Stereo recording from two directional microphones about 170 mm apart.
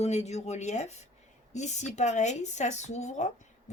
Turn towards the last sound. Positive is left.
turn(degrees=40)  # may be behind; listen again after turning